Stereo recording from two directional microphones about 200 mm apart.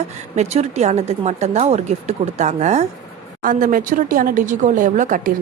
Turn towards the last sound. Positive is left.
turn(degrees=-40)  # may be behind; listen again after turning